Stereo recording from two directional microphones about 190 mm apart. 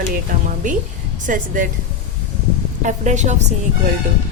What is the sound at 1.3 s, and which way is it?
Speech, 45° right (ahead or behind).